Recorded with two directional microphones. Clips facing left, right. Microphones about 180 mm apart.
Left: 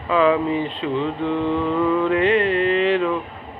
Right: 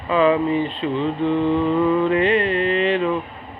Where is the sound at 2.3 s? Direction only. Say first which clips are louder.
Left 1 dB; 55° left (ahead or behind).